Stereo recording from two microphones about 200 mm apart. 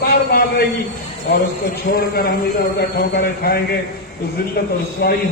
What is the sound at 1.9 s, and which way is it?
A man's voice, 50° left (ahead or behind).